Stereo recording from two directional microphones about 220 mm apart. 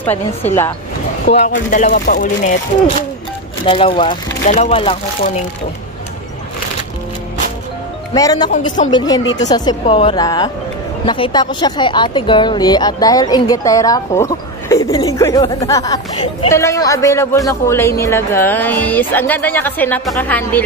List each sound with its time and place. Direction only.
0.0 s speech: 10° left (ahead or behind)
1.4 s speech: 35° left (ahead or behind)
3.6 s speech: 25° left (ahead or behind)
8.1 s speech: 15° left (ahead or behind)